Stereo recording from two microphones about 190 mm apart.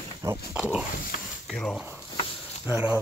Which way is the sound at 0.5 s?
5° right (ahead or behind).